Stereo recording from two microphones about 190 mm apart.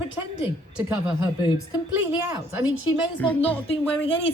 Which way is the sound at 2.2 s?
15° right (ahead or behind).